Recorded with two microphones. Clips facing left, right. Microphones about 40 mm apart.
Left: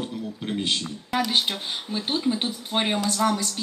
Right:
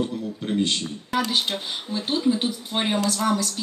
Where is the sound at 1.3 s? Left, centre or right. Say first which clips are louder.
Even; left.